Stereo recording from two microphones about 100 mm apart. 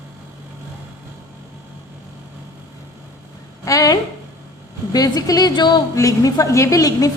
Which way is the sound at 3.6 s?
35° left (ahead or behind).